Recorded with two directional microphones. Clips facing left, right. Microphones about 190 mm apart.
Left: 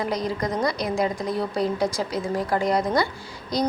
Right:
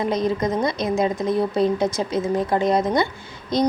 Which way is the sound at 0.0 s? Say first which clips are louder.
Right 4 dB; 20° right (ahead or behind).